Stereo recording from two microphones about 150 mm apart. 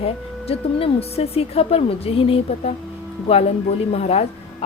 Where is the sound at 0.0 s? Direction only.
40° left (ahead or behind).